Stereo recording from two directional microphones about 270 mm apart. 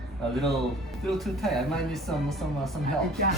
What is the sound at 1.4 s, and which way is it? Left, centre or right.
Speech, centre.